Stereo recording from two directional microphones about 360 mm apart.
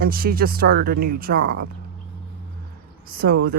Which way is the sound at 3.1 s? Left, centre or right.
Right.